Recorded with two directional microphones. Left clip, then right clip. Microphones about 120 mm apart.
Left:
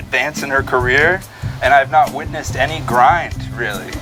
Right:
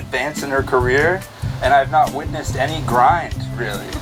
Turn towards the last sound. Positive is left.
turn(degrees=25)  # may be behind; listen again after turning